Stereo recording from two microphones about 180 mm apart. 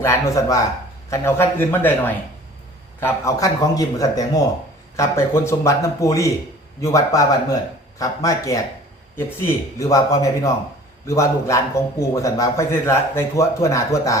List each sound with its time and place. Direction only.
0.0 s a man's voice: 15° left (ahead or behind)
9.7 s a man's voice: 20° left (ahead or behind)